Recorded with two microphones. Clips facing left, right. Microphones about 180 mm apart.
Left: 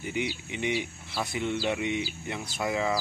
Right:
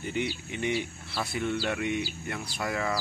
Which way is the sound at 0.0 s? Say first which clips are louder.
Even; 15° left (ahead or behind).